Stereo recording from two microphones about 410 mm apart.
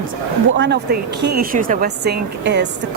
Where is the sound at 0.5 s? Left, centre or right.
Right.